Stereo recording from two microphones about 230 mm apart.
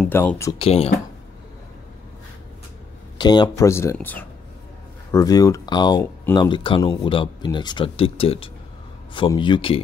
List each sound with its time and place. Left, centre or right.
0.0 s speech: centre
0.6 s speech: left
3.2 s speech: centre